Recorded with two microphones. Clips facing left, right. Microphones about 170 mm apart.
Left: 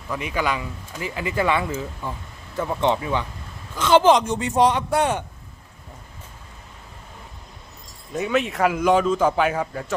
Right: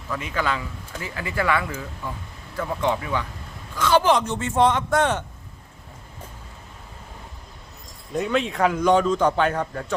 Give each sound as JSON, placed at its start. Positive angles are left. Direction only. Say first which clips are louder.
{"t": 0.1, "sound": "speech", "louder": "left 1 dB", "side_deg": 15}
{"t": 8.1, "sound": "speech", "louder": "left 1 dB", "side_deg": 5}